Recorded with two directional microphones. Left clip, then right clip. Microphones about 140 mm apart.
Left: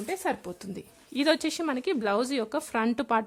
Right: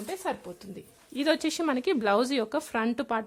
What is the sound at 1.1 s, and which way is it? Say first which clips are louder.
Speech: left 2 dB; 20° left (ahead or behind).